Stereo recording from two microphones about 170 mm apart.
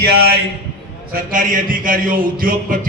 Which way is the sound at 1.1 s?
55° right (ahead or behind).